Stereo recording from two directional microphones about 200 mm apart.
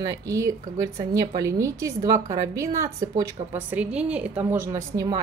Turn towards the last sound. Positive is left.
turn(degrees=-20)  # may be behind; listen again after turning